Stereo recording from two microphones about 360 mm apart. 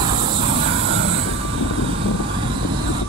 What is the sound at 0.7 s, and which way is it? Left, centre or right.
Vehicle, right.